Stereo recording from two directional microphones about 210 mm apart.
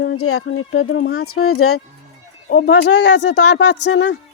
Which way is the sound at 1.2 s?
90° left.